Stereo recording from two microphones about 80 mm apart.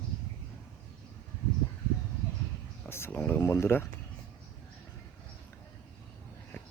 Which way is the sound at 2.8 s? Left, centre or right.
Left.